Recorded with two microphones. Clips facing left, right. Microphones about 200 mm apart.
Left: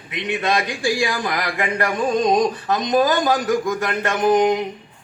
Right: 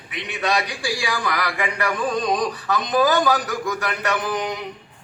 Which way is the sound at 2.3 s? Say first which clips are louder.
Left 4 dB; 20° left (ahead or behind).